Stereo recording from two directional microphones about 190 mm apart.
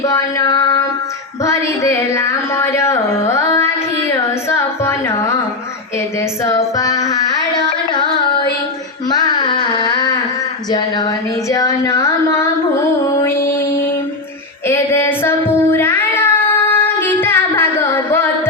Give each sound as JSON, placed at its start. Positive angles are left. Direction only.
{"t": 0.0, "sound": "music", "side_deg": 15}
{"t": 1.5, "sound": "a sound", "side_deg": 15}
{"t": 4.4, "sound": "music", "side_deg": 15}
{"t": 6.4, "sound": "music", "side_deg": 15}
{"t": 9.0, "sound": "carnatic music", "side_deg": 25}
{"t": 10.7, "sound": "a sound", "side_deg": 20}
{"t": 14.7, "sound": "child singing", "side_deg": 10}